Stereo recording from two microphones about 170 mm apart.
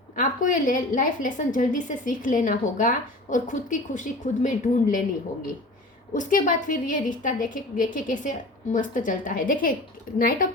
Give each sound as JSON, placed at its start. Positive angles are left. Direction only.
{"t": 0.2, "sound": "a woman's voice", "side_deg": 50}
{"t": 6.1, "sound": "a woman's voice", "side_deg": 50}